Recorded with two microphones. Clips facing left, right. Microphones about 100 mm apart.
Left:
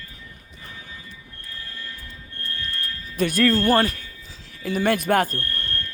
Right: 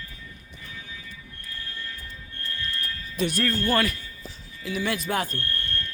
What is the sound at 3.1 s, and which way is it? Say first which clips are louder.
Speech: left 4 dB; 50° left (ahead or behind).